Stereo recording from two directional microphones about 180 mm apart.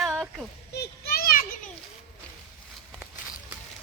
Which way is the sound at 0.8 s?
60° left (ahead or behind).